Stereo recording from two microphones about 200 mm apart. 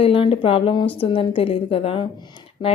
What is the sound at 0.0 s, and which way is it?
A woman's voice, 30° left (ahead or behind).